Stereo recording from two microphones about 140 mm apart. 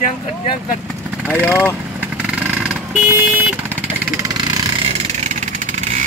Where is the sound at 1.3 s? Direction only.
15° left (ahead or behind).